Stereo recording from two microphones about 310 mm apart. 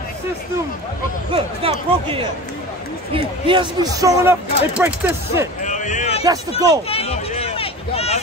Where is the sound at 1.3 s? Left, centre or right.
Centre.